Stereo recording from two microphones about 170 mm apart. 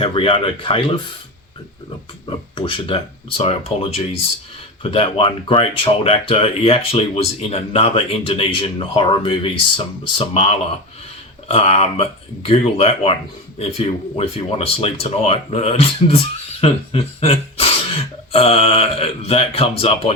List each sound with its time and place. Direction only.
0.0 s speech: 30° left (ahead or behind)
2.6 s speech: 30° left (ahead or behind)